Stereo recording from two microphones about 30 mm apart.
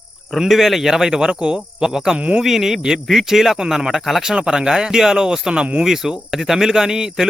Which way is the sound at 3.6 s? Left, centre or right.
Right.